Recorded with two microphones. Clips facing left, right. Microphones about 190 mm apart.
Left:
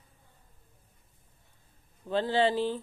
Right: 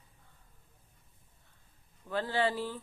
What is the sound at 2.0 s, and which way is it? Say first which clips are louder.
Speech: left 5 dB; 25° left (ahead or behind).